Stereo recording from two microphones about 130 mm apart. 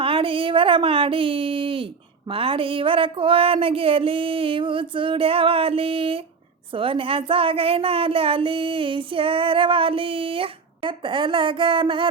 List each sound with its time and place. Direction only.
0.0 s a woman's voice: 45° right (ahead or behind)